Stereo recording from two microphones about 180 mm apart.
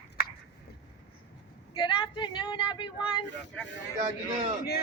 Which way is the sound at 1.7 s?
25° left (ahead or behind).